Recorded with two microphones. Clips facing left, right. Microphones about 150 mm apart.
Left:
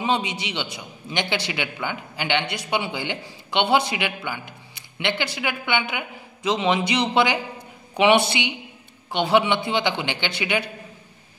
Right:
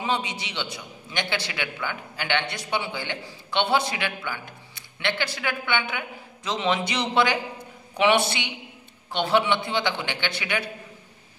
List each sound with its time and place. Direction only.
0.0 s a man's voice: 20° left (ahead or behind)